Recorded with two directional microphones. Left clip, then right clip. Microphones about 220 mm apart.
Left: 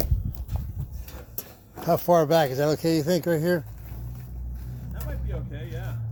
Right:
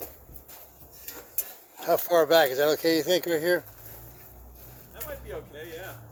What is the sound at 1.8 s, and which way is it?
Speech, 15° left (ahead or behind).